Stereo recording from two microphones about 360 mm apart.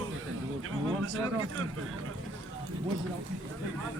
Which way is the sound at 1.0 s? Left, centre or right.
Right.